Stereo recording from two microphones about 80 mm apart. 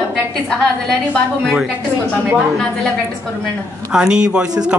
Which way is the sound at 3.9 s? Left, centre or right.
Centre.